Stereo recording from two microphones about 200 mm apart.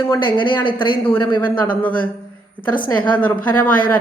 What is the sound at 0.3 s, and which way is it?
Speech, 25° left (ahead or behind).